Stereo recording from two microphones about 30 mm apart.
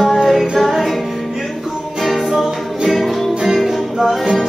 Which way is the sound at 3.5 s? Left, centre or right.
Centre.